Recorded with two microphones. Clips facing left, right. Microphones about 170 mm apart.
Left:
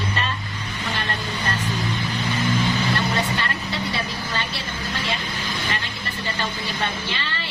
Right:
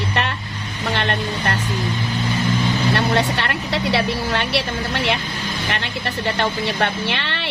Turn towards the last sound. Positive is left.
turn(degrees=-70)  # may be behind; listen again after turning